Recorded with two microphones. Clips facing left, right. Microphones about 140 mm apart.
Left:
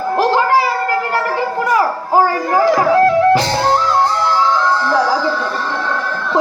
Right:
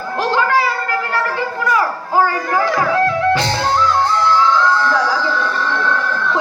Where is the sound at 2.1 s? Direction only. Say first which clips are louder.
Left 3 dB; 35° left (ahead or behind).